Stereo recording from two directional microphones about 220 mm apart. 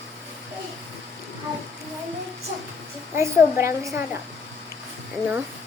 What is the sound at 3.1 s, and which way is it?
Speech, 10° right (ahead or behind).